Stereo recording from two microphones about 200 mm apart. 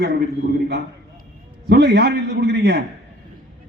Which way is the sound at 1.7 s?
55° right (ahead or behind).